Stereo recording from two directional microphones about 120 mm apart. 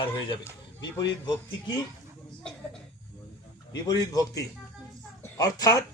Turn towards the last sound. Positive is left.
turn(degrees=30)  # may be behind; listen again after turning